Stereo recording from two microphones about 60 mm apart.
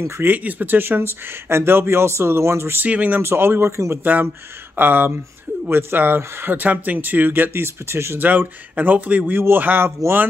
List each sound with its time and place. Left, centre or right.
0.2 s speech: right
2.8 s speech: right
3.2 s speech: right
3.7 s speech: right
4.0 s speech: right
8.2 s speech: right